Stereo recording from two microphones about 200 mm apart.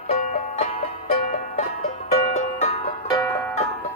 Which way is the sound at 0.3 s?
40° left (ahead or behind).